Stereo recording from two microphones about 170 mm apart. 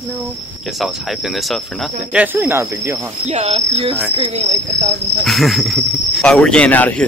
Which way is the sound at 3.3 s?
40° right (ahead or behind).